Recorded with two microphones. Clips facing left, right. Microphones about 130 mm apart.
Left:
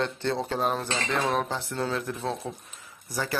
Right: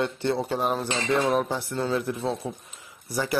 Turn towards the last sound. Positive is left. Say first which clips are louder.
# right 3 dB
turn(degrees=-15)  # may be behind; listen again after turning